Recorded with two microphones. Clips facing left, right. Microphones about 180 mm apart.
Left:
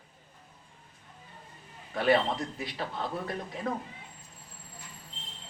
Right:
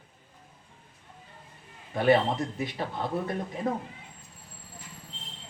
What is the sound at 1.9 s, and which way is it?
A man's voice, 25° right (ahead or behind).